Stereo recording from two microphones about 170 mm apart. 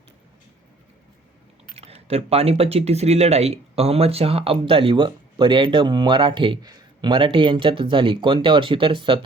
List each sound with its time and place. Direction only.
1.7 s speech: 35° right (ahead or behind)